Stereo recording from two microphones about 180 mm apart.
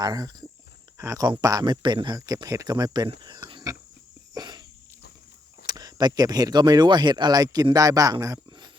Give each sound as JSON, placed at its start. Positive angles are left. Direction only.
{"t": 0.0, "sound": "speech", "side_deg": -20}
{"t": 4.4, "sound": "a sound", "side_deg": -25}
{"t": 5.6, "sound": "speech", "side_deg": -20}